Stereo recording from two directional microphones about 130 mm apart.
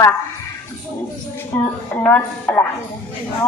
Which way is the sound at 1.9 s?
10° left (ahead or behind).